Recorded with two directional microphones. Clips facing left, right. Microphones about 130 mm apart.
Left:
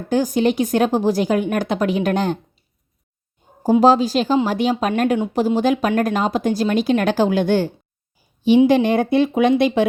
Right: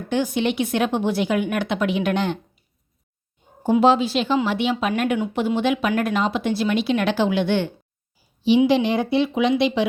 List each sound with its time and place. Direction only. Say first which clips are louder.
0.1 s speech: left 4 dB; 40° left (ahead or behind)
3.6 s speech: left 3 dB; 40° left (ahead or behind)